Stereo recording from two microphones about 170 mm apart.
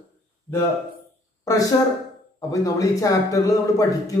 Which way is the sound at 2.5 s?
20° left (ahead or behind).